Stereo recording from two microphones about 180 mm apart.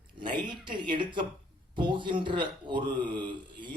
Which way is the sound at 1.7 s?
25° right (ahead or behind).